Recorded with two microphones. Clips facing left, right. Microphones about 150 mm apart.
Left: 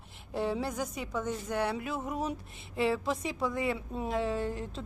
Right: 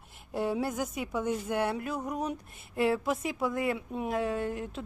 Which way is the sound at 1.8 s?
Centre (ahead or behind).